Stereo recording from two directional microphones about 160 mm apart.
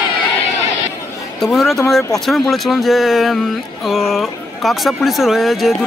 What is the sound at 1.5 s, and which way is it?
Speech, centre (ahead or behind).